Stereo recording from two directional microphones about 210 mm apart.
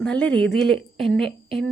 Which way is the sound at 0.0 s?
5° left (ahead or behind).